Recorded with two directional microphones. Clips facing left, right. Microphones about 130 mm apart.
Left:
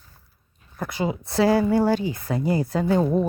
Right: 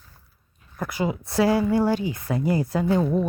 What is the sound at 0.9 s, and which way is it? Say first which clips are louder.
Speech: even; 25° left (ahead or behind).